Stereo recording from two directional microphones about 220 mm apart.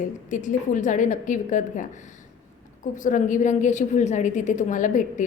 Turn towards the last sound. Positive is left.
turn(degrees=35)  # may be behind; listen again after turning